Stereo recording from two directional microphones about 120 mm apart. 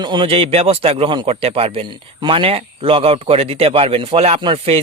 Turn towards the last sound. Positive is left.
turn(degrees=-50)  # may be behind; listen again after turning